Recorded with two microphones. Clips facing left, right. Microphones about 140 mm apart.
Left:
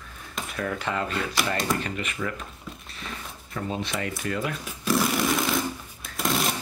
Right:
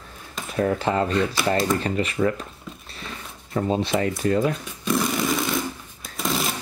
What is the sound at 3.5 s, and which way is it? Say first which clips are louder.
Speech: right 8 dB; 35° right (ahead or behind).